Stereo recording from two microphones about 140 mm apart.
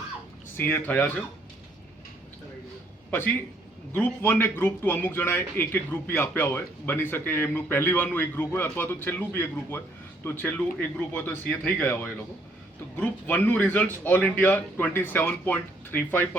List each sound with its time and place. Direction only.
0.5 s a man's voice: 15° left (ahead or behind)
3.1 s a man's voice: 15° left (ahead or behind)